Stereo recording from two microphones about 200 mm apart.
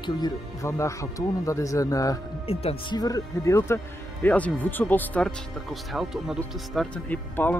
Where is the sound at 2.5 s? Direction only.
30° left (ahead or behind).